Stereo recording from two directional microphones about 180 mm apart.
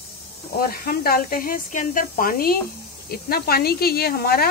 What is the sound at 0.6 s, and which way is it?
Speech, 55° left (ahead or behind).